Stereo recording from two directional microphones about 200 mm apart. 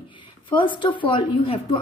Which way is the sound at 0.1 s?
25° left (ahead or behind).